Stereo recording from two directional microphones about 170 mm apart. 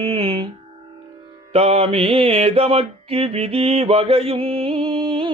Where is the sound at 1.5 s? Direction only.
35° right (ahead or behind).